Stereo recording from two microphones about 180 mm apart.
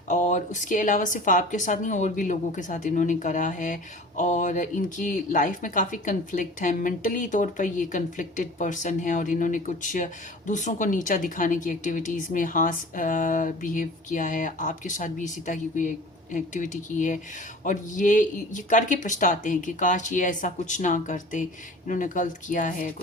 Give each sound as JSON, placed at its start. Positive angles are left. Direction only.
{"t": 0.1, "sound": "speech", "side_deg": 45}